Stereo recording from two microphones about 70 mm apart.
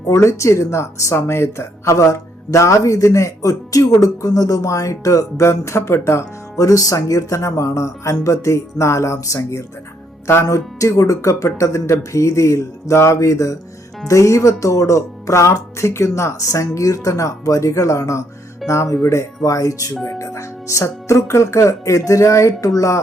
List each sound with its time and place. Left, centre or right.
0.1 s speech: left
6.6 s speech: left